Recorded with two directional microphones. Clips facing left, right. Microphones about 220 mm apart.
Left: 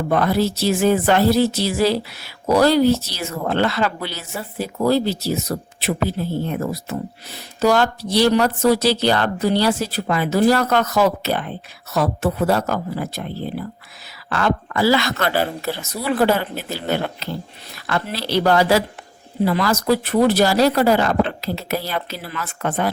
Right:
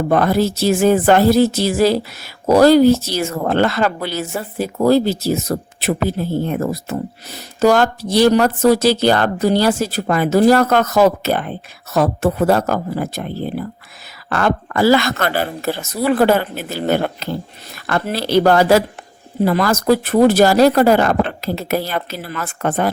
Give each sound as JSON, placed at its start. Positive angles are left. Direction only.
{"t": 0.1, "sound": "speech", "side_deg": -50}